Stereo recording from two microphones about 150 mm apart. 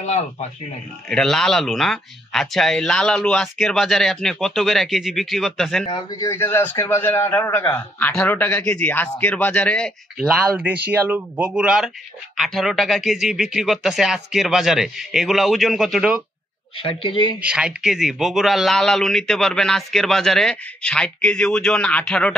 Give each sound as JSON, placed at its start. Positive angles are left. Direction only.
{"t": 0.0, "sound": "speech", "side_deg": 45}
{"t": 1.0, "sound": "a man's voice", "side_deg": 5}
{"t": 5.9, "sound": "a man's voice", "side_deg": 30}
{"t": 10.1, "sound": "a man's voice", "side_deg": -5}
{"t": 16.7, "sound": "a man's voice", "side_deg": 35}
{"t": 17.4, "sound": "a man's voice", "side_deg": -5}